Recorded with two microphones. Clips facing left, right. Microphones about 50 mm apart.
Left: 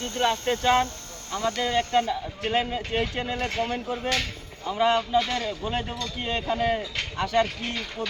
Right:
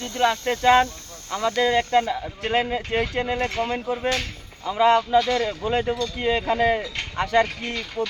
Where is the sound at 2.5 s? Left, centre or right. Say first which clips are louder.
Right 3 dB; right.